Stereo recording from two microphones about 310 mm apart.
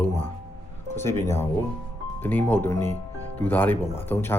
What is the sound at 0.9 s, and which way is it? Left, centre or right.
Speech, centre.